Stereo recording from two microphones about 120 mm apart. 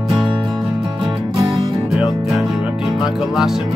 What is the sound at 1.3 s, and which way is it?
Music, 40° right (ahead or behind).